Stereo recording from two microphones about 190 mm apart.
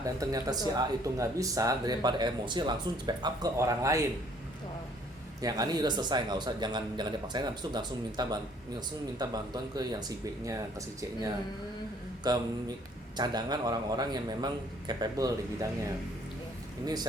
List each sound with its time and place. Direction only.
0.0 s speech: 20° right (ahead or behind)
5.4 s speech: 20° right (ahead or behind)